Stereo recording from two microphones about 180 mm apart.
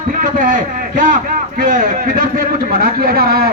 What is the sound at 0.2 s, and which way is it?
A man's voice, 45° right (ahead or behind).